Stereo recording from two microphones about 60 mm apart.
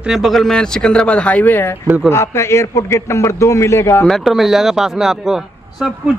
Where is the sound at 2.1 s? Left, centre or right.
Left.